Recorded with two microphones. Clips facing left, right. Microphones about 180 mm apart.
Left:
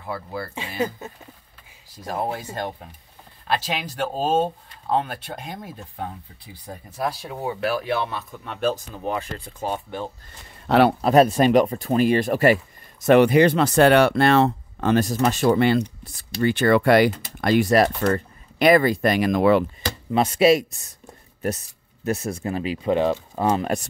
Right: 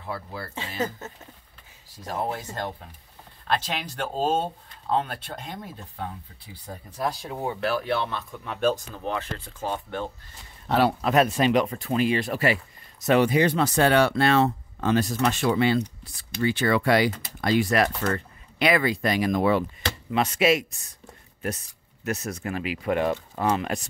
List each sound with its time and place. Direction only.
0.0 s speech: 10° left (ahead or behind)
3.4 s speech: 10° left (ahead or behind)
6.7 s speech: 10° left (ahead or behind)
8.9 s speech: 15° left (ahead or behind)
11.0 s speech: 35° left (ahead or behind)
13.0 s speech: 60° left (ahead or behind)
15.0 s speech: 40° left (ahead or behind); by 17.6 s 55° left (ahead or behind)
18.0 s speech: 35° left (ahead or behind); by 19.6 s 75° left (ahead or behind)
20.1 s speech: 30° left (ahead or behind)
22.0 s speech: 30° left (ahead or behind)